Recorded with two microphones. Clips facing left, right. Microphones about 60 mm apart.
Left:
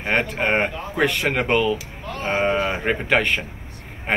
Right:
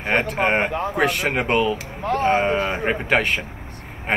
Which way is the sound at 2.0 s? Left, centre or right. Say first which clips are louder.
Right 6 dB; right.